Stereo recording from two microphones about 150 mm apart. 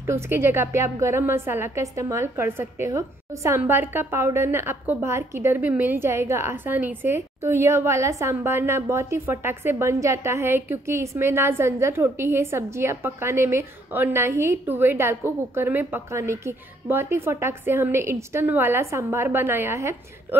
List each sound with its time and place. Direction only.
0.0 s a woman's voice: 15° right (ahead or behind)